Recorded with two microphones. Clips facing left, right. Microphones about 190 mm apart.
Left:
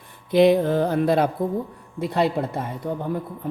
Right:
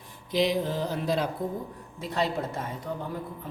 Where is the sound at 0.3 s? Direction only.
55° left (ahead or behind).